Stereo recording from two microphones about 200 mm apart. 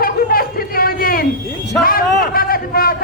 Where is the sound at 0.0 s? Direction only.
45° left (ahead or behind).